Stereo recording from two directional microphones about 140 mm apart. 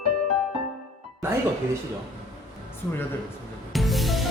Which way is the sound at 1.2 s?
20° right (ahead or behind).